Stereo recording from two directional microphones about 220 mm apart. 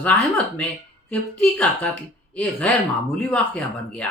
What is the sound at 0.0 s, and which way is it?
Speech, 5° left (ahead or behind).